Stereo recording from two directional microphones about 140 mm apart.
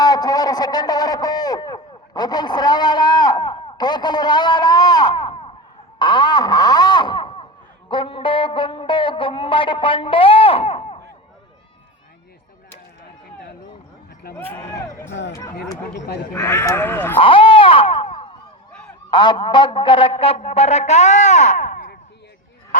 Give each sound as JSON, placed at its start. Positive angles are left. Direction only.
{"t": 0.0, "sound": "a man's voice", "side_deg": 30}
{"t": 7.9, "sound": "music", "side_deg": 35}
{"t": 14.3, "sound": "speech", "side_deg": 15}
{"t": 17.2, "sound": "a sound", "side_deg": 40}
{"t": 18.7, "sound": "honk", "side_deg": 5}
{"t": 19.1, "sound": "a man's voice", "side_deg": 35}